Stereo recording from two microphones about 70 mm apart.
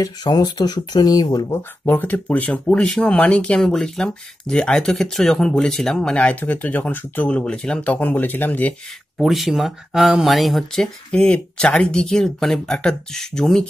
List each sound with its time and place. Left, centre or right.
0.0 s speech: left
1.5 s speech: left
9.2 s speech: centre